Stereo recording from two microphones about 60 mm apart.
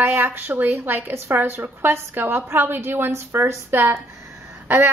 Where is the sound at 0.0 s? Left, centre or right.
Right.